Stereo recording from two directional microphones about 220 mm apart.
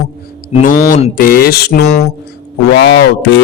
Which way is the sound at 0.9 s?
40° left (ahead or behind).